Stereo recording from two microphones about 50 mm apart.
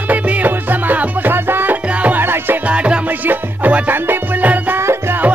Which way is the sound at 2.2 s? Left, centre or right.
Right.